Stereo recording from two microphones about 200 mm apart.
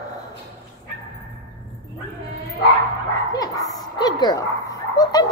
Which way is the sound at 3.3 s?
20° left (ahead or behind).